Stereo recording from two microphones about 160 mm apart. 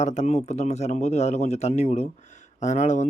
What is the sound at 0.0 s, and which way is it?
Speech, 50° left (ahead or behind).